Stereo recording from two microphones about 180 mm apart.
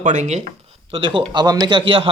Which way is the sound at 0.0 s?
40° right (ahead or behind).